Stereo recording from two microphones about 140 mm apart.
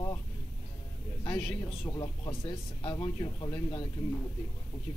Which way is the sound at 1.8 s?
30° left (ahead or behind).